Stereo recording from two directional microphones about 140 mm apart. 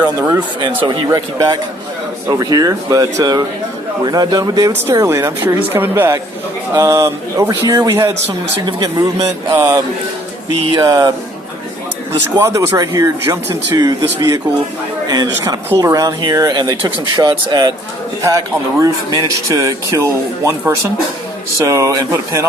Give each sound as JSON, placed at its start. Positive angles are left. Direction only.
{"t": 0.8, "sound": "speech", "side_deg": -30}
{"t": 8.6, "sound": "speech", "side_deg": -35}
{"t": 9.6, "sound": "speech", "side_deg": -25}
{"t": 12.4, "sound": "speech", "side_deg": -25}